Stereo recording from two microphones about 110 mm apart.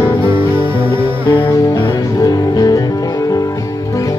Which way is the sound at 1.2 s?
45° left (ahead or behind).